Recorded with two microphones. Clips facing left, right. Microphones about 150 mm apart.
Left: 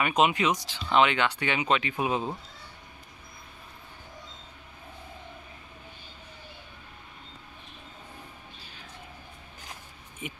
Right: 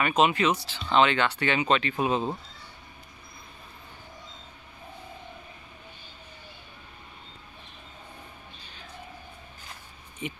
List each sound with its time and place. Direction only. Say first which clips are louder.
0.0 s speech: right 1 dB; 15° left (ahead or behind)
10.2 s speech: right 4 dB; 10° left (ahead or behind)